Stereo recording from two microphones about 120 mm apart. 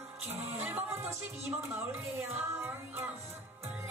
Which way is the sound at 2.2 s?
20° right (ahead or behind).